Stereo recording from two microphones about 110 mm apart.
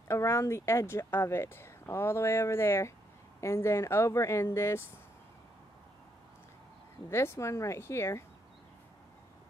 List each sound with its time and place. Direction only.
0.1 s speech: 25° left (ahead or behind)
7.1 s speech: 25° left (ahead or behind)